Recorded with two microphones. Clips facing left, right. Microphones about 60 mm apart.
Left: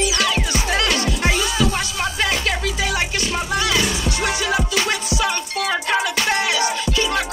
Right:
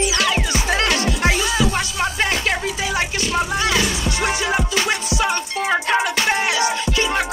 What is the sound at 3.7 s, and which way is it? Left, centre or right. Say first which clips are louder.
Music: even; right.